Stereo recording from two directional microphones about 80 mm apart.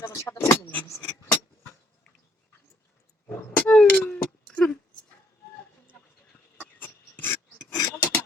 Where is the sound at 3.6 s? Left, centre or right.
Centre.